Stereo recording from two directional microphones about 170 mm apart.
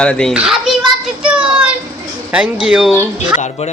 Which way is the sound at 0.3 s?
5° right (ahead or behind).